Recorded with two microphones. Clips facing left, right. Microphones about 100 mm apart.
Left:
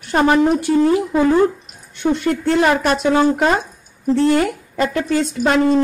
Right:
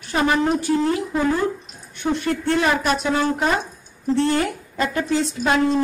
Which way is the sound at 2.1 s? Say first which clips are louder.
Left 3 dB; 80° left.